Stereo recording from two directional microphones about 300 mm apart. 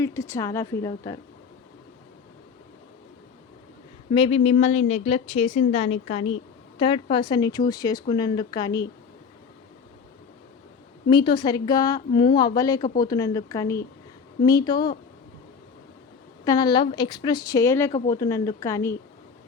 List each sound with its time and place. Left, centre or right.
0.0 s a woman's voice: centre
4.1 s a woman's voice: centre
11.1 s a woman's voice: centre
16.4 s a woman's voice: centre